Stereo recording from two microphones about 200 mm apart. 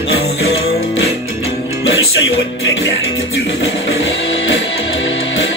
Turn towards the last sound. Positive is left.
turn(degrees=70)  # may be behind; listen again after turning